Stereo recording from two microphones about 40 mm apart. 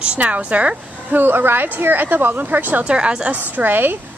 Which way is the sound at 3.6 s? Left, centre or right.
Right.